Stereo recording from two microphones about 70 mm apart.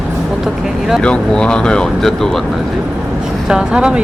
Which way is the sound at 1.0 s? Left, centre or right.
Centre.